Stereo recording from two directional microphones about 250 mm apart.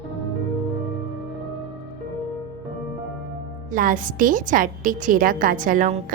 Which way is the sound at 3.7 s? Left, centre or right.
Right.